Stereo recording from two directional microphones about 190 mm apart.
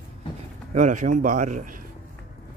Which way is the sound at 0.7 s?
40° right (ahead or behind).